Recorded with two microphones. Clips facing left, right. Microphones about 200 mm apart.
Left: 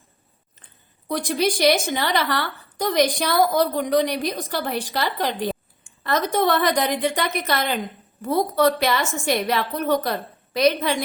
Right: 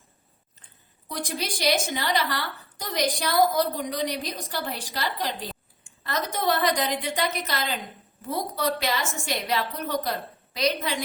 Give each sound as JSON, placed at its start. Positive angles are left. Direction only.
{"t": 1.0, "sound": "a woman's voice", "side_deg": 60}